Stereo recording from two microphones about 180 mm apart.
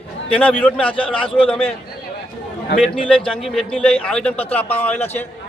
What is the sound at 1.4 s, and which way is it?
Speech, 30° left (ahead or behind).